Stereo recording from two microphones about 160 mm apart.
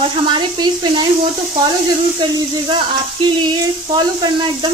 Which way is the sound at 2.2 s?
30° right (ahead or behind).